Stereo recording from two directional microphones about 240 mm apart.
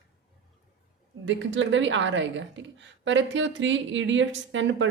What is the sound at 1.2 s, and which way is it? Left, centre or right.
A woman's voice, right.